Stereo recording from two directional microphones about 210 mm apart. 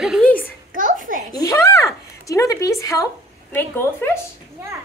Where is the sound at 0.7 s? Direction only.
40° right (ahead or behind).